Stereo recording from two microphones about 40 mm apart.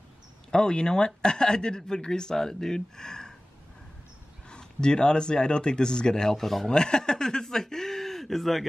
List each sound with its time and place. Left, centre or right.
0.5 s speech: centre
4.5 s speech: left
6.7 s speech: centre